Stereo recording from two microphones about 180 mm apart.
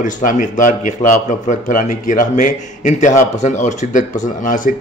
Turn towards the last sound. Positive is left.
turn(degrees=45)  # may be behind; listen again after turning